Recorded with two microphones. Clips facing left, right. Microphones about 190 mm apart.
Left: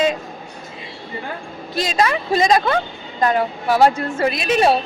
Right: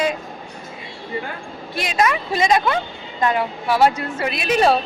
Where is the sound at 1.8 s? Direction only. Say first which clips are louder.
Left 1 dB; 35° left (ahead or behind).